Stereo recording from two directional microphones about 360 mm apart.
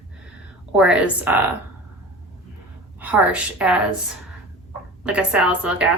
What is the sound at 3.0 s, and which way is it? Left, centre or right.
Speech, centre.